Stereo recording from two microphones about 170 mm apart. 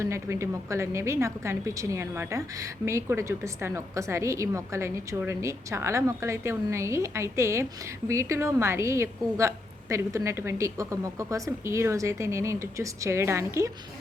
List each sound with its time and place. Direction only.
0.0 s a woman's voice: 15° right (ahead or behind)